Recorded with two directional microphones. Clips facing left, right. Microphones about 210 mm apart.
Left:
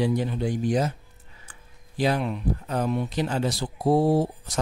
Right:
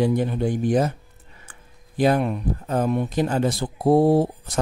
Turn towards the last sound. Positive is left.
turn(degrees=-55)  # may be behind; listen again after turning